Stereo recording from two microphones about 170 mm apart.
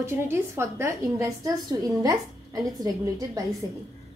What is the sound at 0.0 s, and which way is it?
A woman's voice, 15° right (ahead or behind).